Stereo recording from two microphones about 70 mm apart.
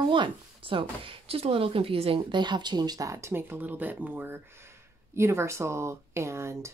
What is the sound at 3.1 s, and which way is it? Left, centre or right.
Speech, right.